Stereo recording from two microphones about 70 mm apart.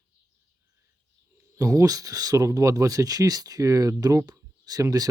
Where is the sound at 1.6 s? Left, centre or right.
Right.